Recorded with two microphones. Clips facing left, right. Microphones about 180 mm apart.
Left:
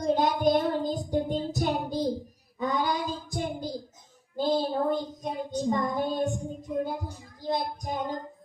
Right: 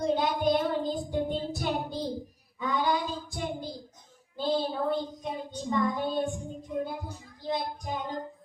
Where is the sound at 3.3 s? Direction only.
45° left (ahead or behind).